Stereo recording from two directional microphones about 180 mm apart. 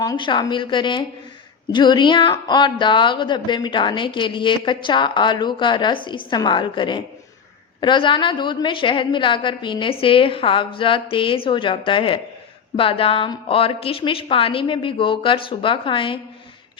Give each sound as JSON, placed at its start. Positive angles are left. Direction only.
{"t": 0.0, "sound": "speech", "side_deg": 25}